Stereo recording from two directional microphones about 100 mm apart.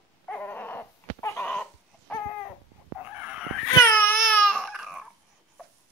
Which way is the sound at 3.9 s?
20° left (ahead or behind).